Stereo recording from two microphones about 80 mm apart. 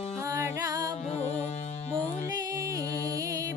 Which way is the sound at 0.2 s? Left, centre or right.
Right.